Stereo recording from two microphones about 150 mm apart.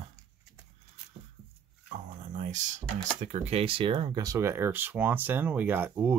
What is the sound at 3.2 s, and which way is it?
Speech, 45° right (ahead or behind).